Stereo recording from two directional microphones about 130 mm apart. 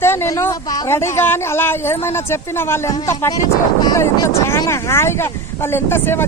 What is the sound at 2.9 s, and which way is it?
A woman's voice, 30° left (ahead or behind).